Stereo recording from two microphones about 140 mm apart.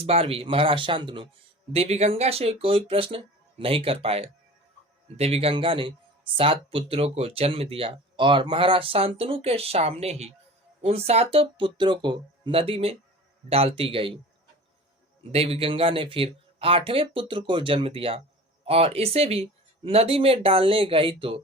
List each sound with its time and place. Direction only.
0.0 s speech: 45° right (ahead or behind)
1.7 s speech: 45° right (ahead or behind)
15.3 s speech: 45° right (ahead or behind)